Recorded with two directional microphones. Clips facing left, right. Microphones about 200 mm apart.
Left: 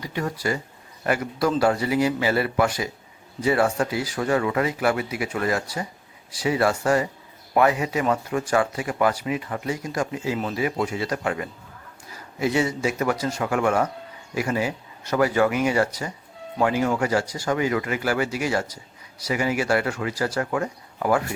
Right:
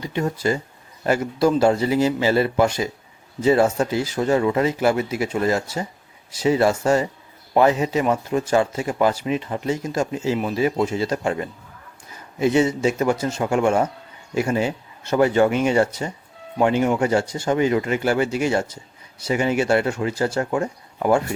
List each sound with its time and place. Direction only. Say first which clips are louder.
0.0 s speech: right 4 dB; 25° right (ahead or behind)